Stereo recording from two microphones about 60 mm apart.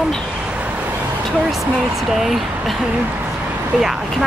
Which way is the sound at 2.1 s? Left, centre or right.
Centre.